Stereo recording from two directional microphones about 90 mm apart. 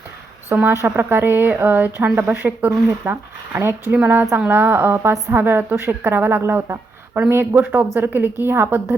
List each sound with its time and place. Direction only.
0.5 s a woman's voice: 25° right (ahead or behind)